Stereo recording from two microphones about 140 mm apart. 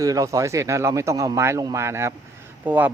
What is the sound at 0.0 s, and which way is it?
Speech, 25° right (ahead or behind).